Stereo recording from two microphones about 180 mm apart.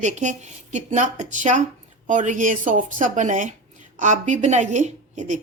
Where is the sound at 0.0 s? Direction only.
40° right (ahead or behind).